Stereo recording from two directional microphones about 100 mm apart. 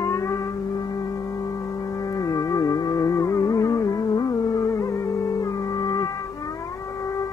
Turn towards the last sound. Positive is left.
turn(degrees=40)  # may be behind; listen again after turning